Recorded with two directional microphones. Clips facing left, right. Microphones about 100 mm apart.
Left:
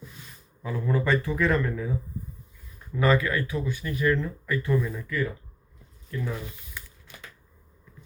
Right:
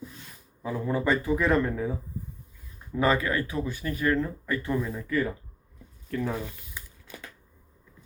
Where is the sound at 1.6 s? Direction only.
30° right (ahead or behind).